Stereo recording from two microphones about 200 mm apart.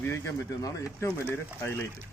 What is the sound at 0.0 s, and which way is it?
Speech, 10° left (ahead or behind).